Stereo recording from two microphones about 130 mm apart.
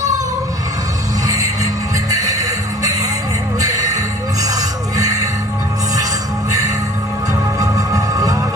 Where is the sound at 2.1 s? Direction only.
25° right (ahead or behind).